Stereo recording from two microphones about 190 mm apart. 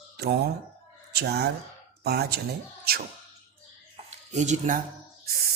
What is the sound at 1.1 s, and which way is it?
Speech, 60° right (ahead or behind).